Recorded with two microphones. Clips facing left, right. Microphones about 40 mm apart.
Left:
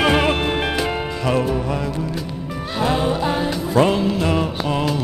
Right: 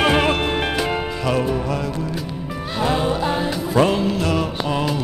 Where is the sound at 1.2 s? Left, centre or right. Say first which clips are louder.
Left 2 dB; centre.